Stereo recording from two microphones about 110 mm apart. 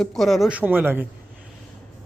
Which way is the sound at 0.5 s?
15° right (ahead or behind).